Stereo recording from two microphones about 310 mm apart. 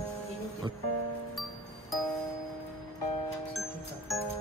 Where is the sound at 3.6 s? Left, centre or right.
Centre.